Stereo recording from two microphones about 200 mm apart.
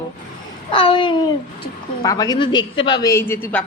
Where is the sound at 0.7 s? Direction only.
25° left (ahead or behind).